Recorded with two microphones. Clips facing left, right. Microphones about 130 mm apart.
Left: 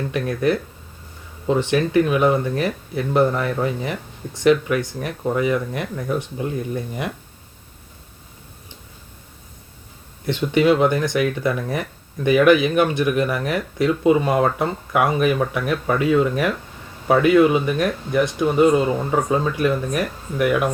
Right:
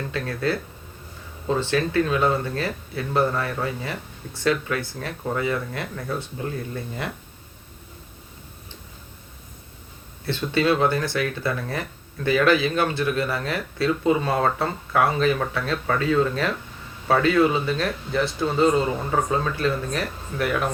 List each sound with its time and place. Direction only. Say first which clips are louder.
0.1 s speech: left 6 dB; 20° left (ahead or behind)
10.2 s speech: left 5 dB; 15° left (ahead or behind)